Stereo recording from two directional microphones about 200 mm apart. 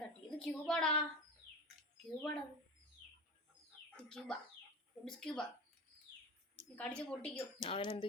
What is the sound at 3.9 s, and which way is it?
Speech, 5° left (ahead or behind).